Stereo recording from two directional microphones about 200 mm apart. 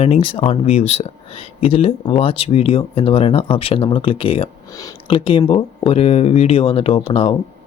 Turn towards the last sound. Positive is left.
turn(degrees=25)  # may be behind; listen again after turning